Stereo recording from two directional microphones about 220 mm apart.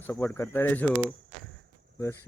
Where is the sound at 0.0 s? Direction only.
10° left (ahead or behind).